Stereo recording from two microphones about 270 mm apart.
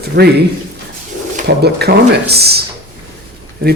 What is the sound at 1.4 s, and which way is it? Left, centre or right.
Speech, right.